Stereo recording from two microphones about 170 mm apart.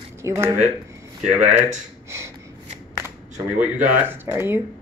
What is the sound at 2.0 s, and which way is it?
Snort, 15° right (ahead or behind).